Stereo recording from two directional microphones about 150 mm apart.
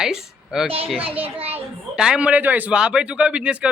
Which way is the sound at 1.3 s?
40° right (ahead or behind).